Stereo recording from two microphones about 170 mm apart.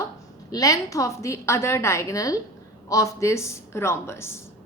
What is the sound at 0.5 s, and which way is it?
A woman's voice, 20° left (ahead or behind).